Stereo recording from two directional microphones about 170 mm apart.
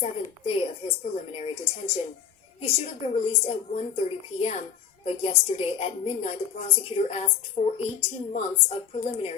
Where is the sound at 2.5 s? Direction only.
35° left (ahead or behind).